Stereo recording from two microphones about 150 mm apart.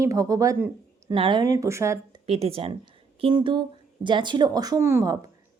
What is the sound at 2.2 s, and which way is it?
Speech, 45° right (ahead or behind).